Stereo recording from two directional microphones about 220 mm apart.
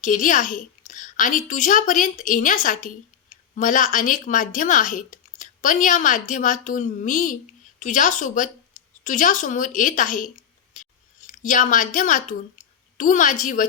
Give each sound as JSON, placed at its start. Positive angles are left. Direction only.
{"t": 0.0, "sound": "a child's voice", "side_deg": 35}
{"t": 10.8, "sound": "scissors", "side_deg": 35}
{"t": 11.3, "sound": "a woman's voice", "side_deg": 35}